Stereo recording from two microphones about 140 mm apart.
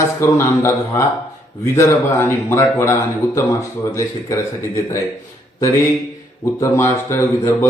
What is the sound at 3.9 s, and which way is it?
A man's voice, 20° left (ahead or behind).